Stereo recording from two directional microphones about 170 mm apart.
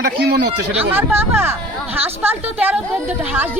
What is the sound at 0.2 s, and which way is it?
Speech, 65° right (ahead or behind).